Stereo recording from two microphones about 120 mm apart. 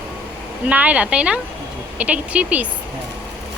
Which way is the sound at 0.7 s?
10° right (ahead or behind).